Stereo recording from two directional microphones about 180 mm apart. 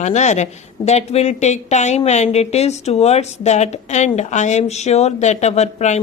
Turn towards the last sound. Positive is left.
turn(degrees=40)  # may be behind; listen again after turning